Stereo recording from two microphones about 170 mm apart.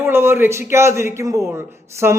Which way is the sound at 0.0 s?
15° right (ahead or behind).